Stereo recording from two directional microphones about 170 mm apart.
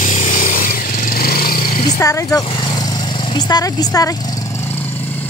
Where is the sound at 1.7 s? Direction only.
45° left (ahead or behind).